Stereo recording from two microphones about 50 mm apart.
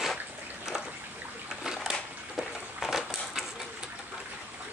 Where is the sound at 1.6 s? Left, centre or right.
Centre.